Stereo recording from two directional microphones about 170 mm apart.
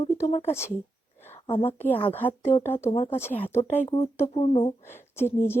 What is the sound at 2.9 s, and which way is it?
Speech, 35° left (ahead or behind).